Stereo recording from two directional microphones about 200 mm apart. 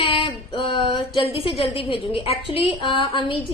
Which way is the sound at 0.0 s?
25° left (ahead or behind).